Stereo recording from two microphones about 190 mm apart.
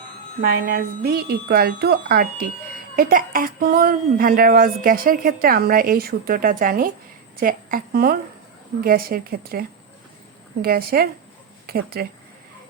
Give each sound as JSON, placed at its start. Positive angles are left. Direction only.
{"t": 0.5, "sound": "speech", "side_deg": -55}